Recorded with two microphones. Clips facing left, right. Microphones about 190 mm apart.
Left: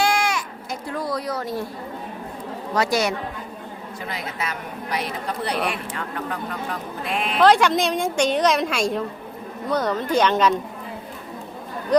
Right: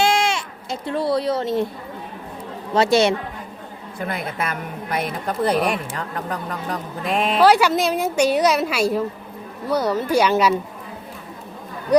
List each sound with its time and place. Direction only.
0.0 s a sound: 25° right (ahead or behind)
2.7 s speech: 25° right (ahead or behind)
4.0 s a woman's voice: 55° right (ahead or behind)
7.4 s a woman's voice: 5° right (ahead or behind)